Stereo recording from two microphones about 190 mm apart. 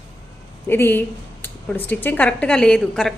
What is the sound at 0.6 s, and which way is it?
A woman's voice, 10° left (ahead or behind).